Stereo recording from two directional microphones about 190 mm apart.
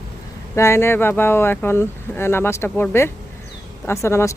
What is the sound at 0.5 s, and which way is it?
Speech, 15° left (ahead or behind).